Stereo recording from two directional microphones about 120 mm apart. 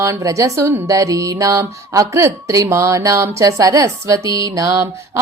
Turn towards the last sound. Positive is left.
turn(degrees=-25)  # may be behind; listen again after turning